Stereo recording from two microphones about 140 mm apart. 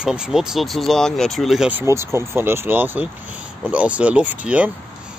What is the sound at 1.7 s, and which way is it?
Speech, 20° right (ahead or behind).